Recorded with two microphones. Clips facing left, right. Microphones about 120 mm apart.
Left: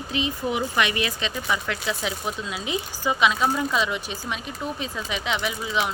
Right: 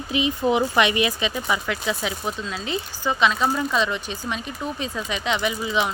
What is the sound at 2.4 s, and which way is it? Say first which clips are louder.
A woman's voice: right 1 dB; 10° left (ahead or behind).